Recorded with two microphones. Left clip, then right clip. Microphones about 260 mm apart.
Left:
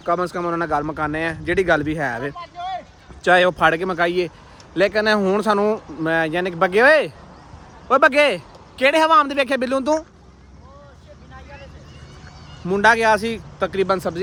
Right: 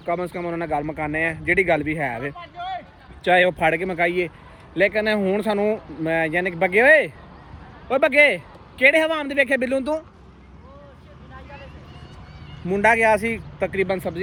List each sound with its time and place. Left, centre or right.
0.0 s speech: left
2.3 s a sound: left
3.2 s speech: centre
12.6 s speech: centre